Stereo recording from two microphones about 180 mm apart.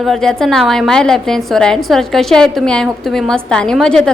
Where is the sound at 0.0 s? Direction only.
Centre (ahead or behind).